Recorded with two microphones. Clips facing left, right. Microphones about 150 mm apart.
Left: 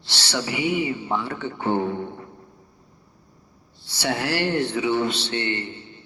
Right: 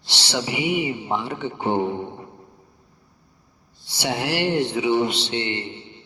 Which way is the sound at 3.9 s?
15° right (ahead or behind).